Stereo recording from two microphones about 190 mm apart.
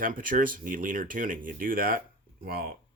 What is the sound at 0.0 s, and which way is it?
Speech, 45° right (ahead or behind).